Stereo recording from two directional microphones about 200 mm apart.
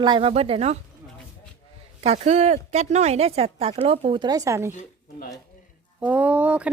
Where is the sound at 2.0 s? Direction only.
35° right (ahead or behind); by 4.7 s 15° right (ahead or behind).